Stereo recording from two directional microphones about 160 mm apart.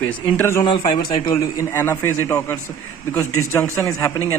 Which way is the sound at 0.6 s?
30° left (ahead or behind).